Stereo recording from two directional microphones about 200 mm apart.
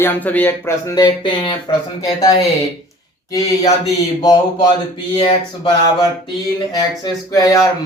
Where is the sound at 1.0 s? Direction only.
25° left (ahead or behind).